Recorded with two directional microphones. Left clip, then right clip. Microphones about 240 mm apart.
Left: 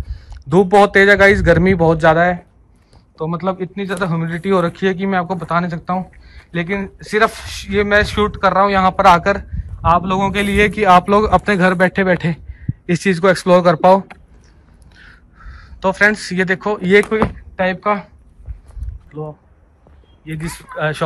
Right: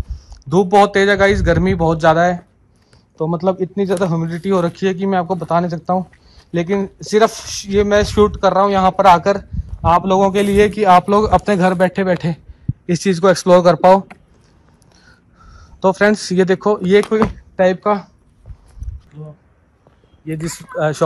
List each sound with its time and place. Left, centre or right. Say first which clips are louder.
0.1 s speech: left 2 dB; centre
19.1 s speech: left 11 dB; centre
20.2 s speech: right 3 dB; right